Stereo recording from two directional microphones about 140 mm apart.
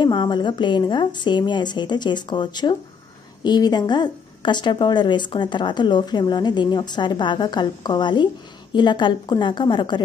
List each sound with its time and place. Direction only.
0.0 s a woman's voice: 30° left (ahead or behind)